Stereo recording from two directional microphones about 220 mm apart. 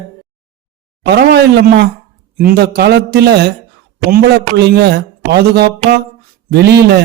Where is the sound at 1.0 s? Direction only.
50° right (ahead or behind).